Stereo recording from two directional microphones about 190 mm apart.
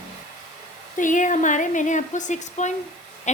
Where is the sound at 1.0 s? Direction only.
40° left (ahead or behind).